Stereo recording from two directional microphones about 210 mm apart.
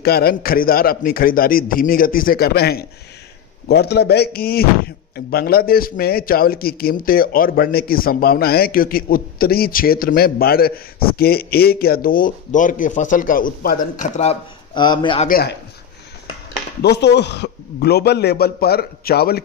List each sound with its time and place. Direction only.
0.0 s a man's voice: 45° left (ahead or behind)
14.7 s speech: 20° left (ahead or behind)
15.2 s a man's voice: 45° left (ahead or behind)
16.8 s a man's voice: 50° left (ahead or behind)